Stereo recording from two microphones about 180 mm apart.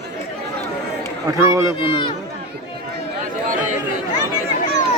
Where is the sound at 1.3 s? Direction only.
20° right (ahead or behind).